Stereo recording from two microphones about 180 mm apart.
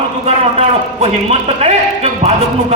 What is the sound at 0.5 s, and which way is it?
A man's voice, 35° right (ahead or behind).